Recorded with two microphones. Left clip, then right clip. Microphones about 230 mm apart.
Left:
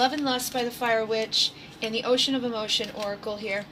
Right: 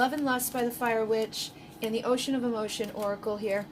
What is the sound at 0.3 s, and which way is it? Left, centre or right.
A woman's voice, right.